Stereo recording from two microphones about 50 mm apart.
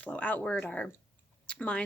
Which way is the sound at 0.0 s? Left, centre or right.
Left.